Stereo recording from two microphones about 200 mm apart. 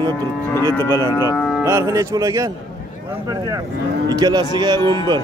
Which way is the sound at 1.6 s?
15° right (ahead or behind).